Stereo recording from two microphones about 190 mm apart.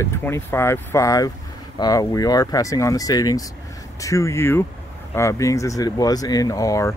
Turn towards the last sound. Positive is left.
turn(degrees=15)  # may be behind; listen again after turning